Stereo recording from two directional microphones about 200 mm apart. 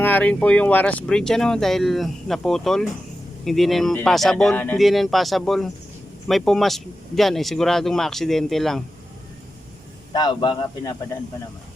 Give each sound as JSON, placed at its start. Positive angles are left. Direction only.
{"t": 0.0, "sound": "speech", "side_deg": 10}
{"t": 10.1, "sound": "a man's voice", "side_deg": 20}